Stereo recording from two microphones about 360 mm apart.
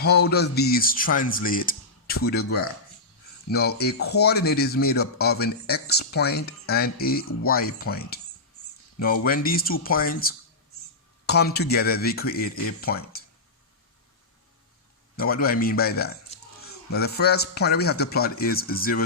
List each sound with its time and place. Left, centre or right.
0.3 s speech: left
3.5 s speech: left
9.2 s speech: left
15.1 s a man's voice: left